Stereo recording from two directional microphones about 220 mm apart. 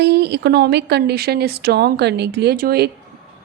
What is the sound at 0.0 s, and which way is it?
Speech, 50° right (ahead or behind).